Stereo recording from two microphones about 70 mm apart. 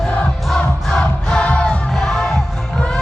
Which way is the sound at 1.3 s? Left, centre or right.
Centre.